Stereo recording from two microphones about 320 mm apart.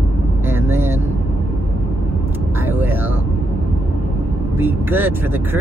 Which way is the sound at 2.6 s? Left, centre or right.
Centre.